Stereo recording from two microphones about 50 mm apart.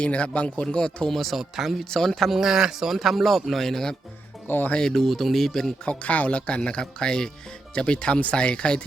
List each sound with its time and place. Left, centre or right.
0.0 s speech: left
1.1 s a man's voice: centre
2.3 s a man's voice: centre
4.4 s speech: left
4.8 s speech: centre
5.8 s speech: left